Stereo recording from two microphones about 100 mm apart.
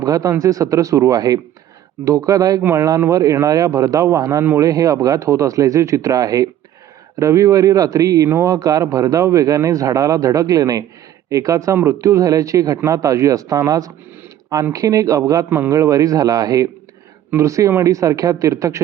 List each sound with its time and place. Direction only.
0.0 s speech: 35° right (ahead or behind)
15.4 s a man's voice: 20° right (ahead or behind)
15.7 s speech: 35° right (ahead or behind)